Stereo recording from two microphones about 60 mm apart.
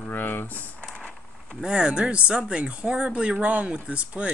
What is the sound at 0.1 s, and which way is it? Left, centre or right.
Speech, left.